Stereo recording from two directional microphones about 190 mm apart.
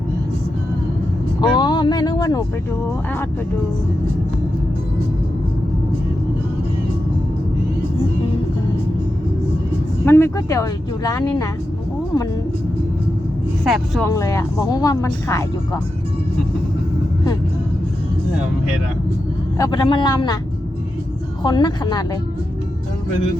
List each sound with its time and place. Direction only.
1.4 s speech: 25° left (ahead or behind)
10.1 s speech: 10° left (ahead or behind)
13.7 s speech: centre (ahead or behind)
14.1 s speech: 15° left (ahead or behind)
19.5 s speech: 20° left (ahead or behind)
21.4 s speech: 25° left (ahead or behind)